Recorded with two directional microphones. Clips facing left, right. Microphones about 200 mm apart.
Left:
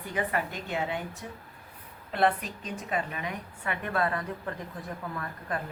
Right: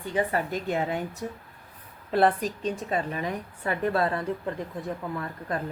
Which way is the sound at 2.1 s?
35° right (ahead or behind).